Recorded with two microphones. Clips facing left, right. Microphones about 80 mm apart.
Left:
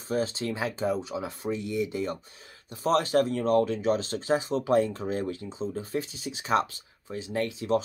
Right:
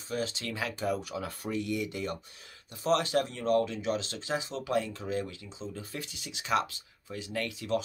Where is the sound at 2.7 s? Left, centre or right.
Left.